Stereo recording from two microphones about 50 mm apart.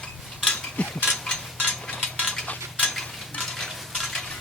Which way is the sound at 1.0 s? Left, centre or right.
Centre.